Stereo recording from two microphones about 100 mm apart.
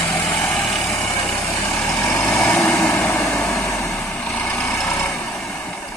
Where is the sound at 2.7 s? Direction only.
10° left (ahead or behind).